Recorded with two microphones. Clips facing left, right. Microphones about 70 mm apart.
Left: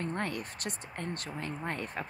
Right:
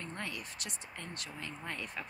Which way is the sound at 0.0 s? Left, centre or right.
Left.